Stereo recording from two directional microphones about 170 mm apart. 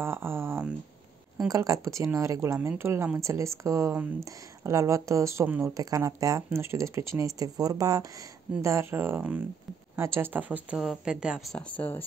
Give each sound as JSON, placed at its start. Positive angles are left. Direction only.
{"t": 0.0, "sound": "speech", "side_deg": -15}